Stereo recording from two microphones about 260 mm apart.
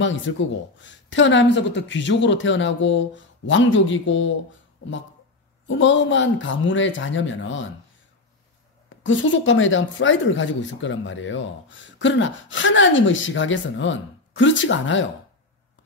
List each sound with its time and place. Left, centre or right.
0.0 s speech: left
8.8 s speech: left